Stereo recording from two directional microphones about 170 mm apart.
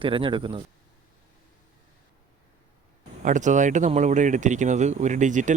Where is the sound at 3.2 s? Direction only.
45° right (ahead or behind).